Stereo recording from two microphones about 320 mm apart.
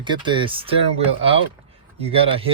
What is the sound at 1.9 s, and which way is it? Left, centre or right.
Speech, centre.